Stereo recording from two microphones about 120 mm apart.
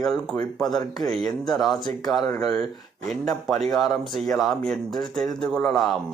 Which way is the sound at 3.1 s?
Centre (ahead or behind).